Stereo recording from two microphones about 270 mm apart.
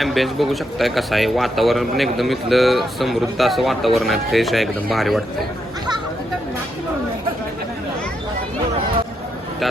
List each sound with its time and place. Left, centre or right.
0.0 s speech: centre